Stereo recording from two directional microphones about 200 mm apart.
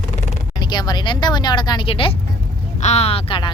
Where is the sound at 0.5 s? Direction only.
20° left (ahead or behind).